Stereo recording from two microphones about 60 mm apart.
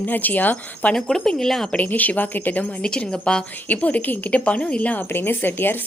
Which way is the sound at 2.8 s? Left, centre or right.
Centre.